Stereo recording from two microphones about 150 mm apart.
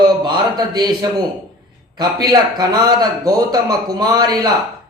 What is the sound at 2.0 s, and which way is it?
A man's voice, 25° right (ahead or behind).